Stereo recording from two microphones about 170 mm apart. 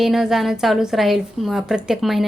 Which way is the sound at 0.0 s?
Centre (ahead or behind).